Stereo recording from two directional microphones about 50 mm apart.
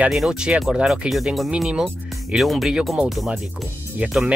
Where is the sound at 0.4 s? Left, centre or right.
Centre.